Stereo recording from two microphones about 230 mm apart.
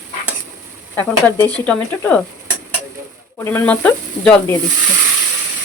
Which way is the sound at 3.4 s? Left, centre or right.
Centre.